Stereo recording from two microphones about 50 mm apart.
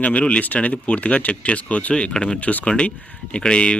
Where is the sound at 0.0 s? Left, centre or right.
Left.